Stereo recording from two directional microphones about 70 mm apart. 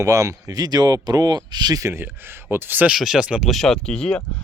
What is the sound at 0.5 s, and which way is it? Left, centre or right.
Speech, right.